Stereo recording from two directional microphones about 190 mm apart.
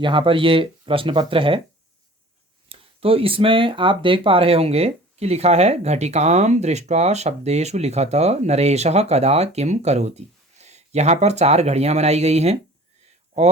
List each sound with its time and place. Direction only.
0.0 s speech: 25° right (ahead or behind)
2.6 s speech: 30° right (ahead or behind)